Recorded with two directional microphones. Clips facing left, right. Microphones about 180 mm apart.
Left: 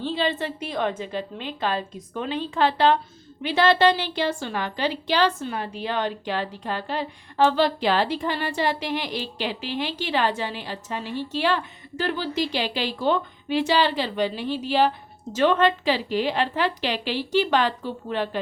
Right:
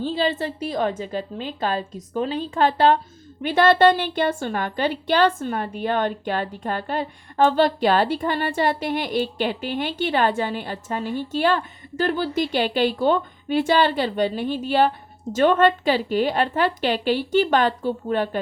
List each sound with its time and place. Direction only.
0.0 s a woman's voice: 40° right (ahead or behind)